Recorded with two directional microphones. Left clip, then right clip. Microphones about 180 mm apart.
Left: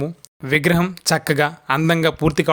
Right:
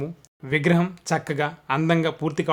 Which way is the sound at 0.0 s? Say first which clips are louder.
Left 6 dB; 30° left (ahead or behind).